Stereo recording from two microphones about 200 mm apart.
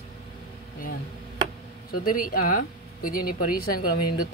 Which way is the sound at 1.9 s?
45° left (ahead or behind).